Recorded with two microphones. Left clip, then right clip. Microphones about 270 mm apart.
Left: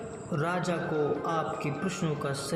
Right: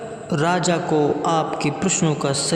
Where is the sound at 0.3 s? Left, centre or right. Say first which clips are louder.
Right 11 dB; right.